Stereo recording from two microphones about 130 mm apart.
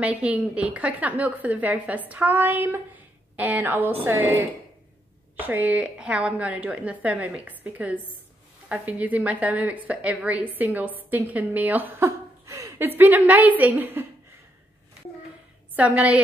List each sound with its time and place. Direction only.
0.0 s a woman's voice: 10° right (ahead or behind)
15.7 s a woman's voice: 10° right (ahead or behind)